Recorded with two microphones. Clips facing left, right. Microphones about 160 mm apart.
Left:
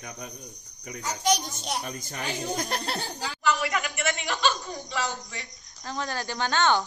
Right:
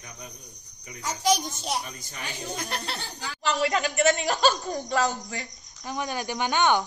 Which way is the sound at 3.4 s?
30° right (ahead or behind).